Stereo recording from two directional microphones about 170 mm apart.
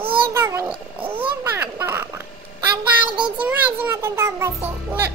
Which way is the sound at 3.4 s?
10° right (ahead or behind).